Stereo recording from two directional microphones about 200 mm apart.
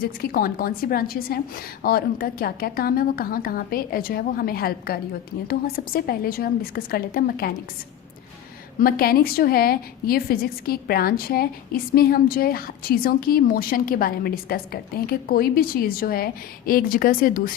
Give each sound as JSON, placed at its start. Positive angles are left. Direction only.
{"t": 0.0, "sound": "a woman's voice", "side_deg": 45}
{"t": 8.8, "sound": "a woman's voice", "side_deg": 50}